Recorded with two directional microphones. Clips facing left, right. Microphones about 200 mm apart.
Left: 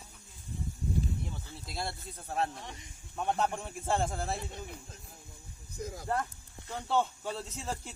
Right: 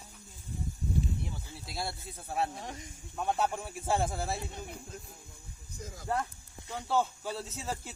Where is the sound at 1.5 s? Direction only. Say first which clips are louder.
Even; 5° right (ahead or behind).